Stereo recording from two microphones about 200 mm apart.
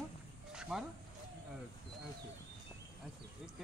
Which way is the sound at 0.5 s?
5° right (ahead or behind).